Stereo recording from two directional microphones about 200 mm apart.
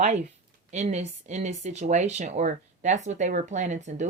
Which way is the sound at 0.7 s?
35° right (ahead or behind).